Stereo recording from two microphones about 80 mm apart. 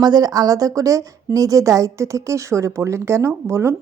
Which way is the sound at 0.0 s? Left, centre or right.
Right.